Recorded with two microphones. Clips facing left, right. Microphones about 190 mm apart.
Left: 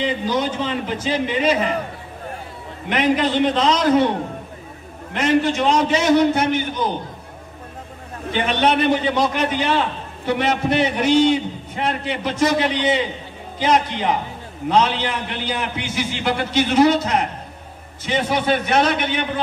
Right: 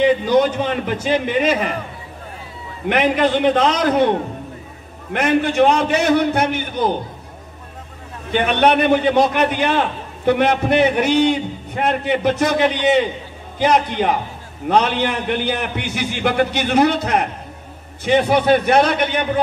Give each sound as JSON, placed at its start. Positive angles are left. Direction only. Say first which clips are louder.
{"t": 0.0, "sound": "a man's voice", "louder": "right 7 dB", "side_deg": -60}
{"t": 2.9, "sound": "a man's voice", "louder": "right 2 dB", "side_deg": -55}
{"t": 5.1, "sound": "a man's voice", "louder": "right 1 dB", "side_deg": -55}
{"t": 8.3, "sound": "a man's voice", "louder": "right 3 dB", "side_deg": -55}